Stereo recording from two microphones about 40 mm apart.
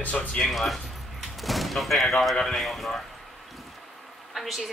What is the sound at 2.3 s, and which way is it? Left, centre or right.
Speech, centre.